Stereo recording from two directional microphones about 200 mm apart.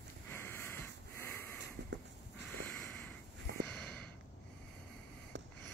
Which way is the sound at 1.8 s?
60° right (ahead or behind).